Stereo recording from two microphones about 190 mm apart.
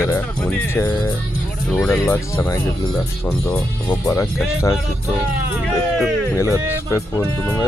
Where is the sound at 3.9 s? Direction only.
15° left (ahead or behind).